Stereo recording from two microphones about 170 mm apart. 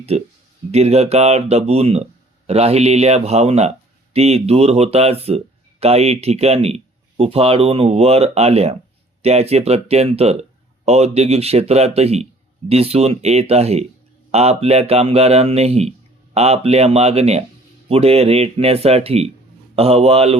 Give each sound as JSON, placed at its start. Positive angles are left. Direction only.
{"t": 0.1, "sound": "speech", "side_deg": -40}